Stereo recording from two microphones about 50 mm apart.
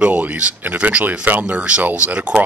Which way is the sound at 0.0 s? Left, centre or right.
Right.